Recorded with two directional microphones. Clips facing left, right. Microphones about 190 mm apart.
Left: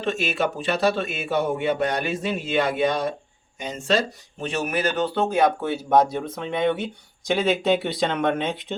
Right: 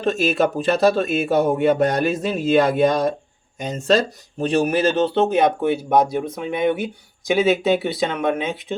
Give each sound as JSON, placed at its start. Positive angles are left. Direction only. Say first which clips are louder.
{"t": 0.0, "sound": "a man's voice", "louder": "right 6 dB", "side_deg": -40}